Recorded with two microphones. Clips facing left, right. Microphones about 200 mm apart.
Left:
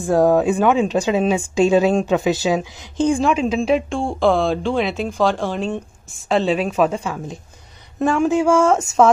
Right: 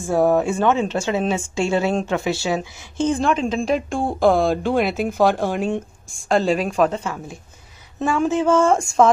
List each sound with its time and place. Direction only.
0.0 s speech: 15° left (ahead or behind); by 5.7 s 10° right (ahead or behind)
6.0 s speech: 5° left (ahead or behind)
8.2 s speech: 10° left (ahead or behind)